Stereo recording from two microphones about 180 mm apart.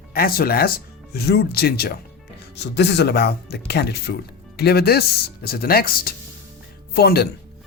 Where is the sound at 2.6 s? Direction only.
70° left (ahead or behind).